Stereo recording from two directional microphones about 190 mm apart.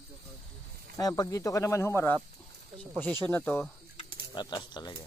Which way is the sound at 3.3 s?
10° left (ahead or behind).